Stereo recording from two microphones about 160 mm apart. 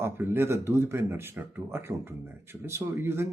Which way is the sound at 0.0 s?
15° right (ahead or behind).